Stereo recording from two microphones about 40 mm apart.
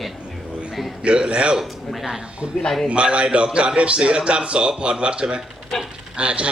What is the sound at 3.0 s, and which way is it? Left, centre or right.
A man's voice, right.